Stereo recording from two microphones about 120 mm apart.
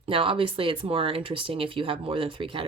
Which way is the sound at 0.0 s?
50° right (ahead or behind).